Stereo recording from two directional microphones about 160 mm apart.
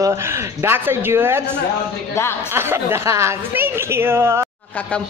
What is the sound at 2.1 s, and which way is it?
Speech, 15° left (ahead or behind).